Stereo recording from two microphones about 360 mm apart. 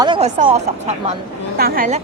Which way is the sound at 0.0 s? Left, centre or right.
Centre.